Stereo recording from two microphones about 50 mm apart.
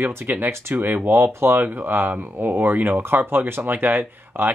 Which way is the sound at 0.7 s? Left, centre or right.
Right.